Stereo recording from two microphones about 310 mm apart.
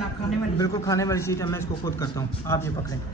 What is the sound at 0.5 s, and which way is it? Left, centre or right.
A man's voice, centre.